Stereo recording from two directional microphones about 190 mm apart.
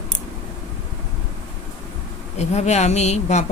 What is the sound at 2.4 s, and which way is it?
Speech, 35° left (ahead or behind).